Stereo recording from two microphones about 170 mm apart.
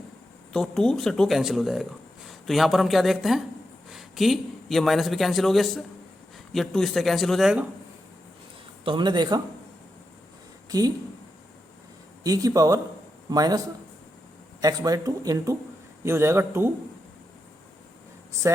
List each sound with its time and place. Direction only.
0.5 s a man's voice: 5° left (ahead or behind)
8.8 s speech: 30° right (ahead or behind)
10.7 s speech: 20° right (ahead or behind)
12.2 s speech: 20° right (ahead or behind)
14.6 s a man's voice: 20° right (ahead or behind)